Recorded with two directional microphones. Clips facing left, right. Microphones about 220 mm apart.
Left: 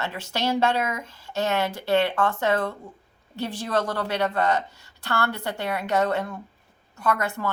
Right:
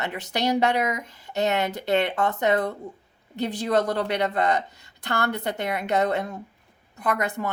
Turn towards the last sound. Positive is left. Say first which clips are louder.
# even
turn(degrees=-20)  # may be behind; listen again after turning